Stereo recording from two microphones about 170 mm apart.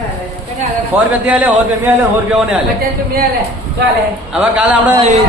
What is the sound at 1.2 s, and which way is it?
Speech, 10° right (ahead or behind).